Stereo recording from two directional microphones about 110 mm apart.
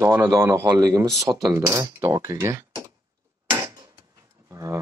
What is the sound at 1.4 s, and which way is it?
Speech, 30° right (ahead or behind).